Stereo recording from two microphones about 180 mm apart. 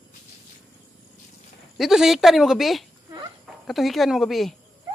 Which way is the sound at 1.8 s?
Centre (ahead or behind).